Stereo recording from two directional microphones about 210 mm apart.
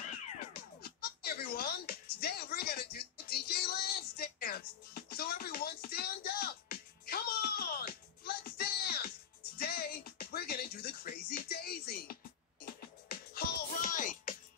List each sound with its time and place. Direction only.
0.8 s music: 45° left (ahead or behind)